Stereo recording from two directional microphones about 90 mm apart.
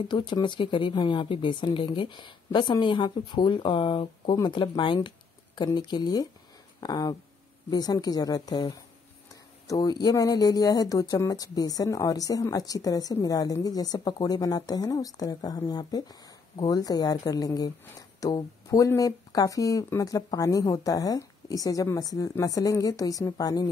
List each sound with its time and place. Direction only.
0.1 s a woman's voice: 60° left (ahead or behind); by 23.7 s 45° left (ahead or behind)